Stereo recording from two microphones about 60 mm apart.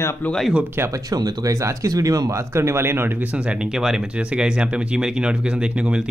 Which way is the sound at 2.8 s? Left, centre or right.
Right.